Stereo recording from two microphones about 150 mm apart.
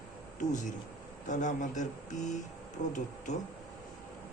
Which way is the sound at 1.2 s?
55° left (ahead or behind).